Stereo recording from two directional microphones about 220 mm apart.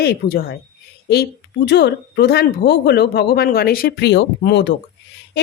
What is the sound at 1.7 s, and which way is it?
Speech, 50° left (ahead or behind).